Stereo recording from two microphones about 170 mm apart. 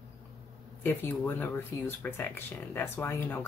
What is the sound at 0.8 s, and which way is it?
Speech, 10° left (ahead or behind).